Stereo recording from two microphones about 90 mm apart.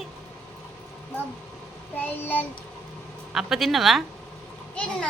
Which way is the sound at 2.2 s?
20° left (ahead or behind).